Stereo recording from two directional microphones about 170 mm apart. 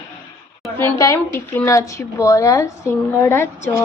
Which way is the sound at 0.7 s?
15° left (ahead or behind).